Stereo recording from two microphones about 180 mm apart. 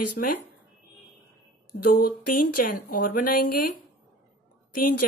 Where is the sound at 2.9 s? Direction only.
50° left (ahead or behind).